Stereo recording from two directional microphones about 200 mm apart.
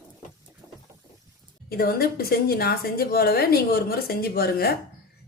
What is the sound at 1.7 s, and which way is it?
A woman's voice, 50° left (ahead or behind).